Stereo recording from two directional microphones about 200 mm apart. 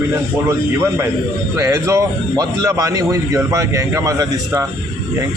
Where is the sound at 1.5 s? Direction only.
15° right (ahead or behind).